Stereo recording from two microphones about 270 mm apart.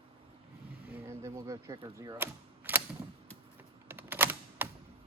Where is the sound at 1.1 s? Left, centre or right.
Centre.